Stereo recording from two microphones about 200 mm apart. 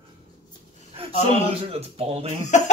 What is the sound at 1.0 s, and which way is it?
Speech, 30° right (ahead or behind).